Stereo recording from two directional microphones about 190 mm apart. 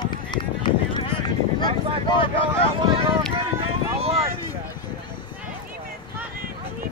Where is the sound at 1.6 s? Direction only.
25° left (ahead or behind).